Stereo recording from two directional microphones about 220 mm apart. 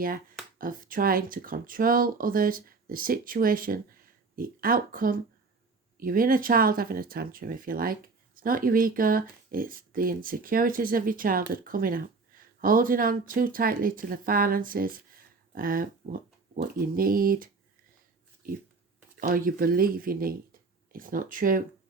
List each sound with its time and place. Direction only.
0.6 s speech: 40° right (ahead or behind)
19.1 s speech: 40° right (ahead or behind)